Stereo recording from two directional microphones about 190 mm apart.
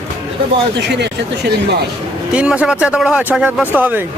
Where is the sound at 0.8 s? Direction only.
65° right (ahead or behind).